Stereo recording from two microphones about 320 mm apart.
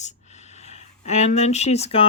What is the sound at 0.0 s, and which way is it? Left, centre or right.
Speech, left.